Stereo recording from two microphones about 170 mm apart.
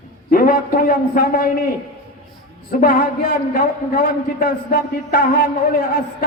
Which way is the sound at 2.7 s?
55° left (ahead or behind).